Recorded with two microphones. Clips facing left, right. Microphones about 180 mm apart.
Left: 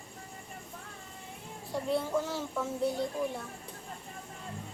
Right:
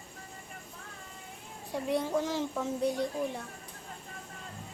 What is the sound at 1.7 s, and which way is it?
Speech, 15° right (ahead or behind).